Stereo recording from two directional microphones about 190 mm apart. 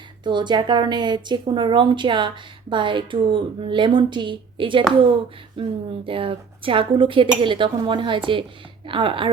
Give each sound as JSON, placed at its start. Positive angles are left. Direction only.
{"t": 0.3, "sound": "a woman's voice", "side_deg": -25}